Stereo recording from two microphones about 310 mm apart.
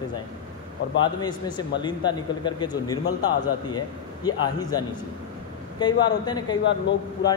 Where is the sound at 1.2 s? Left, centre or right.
Centre.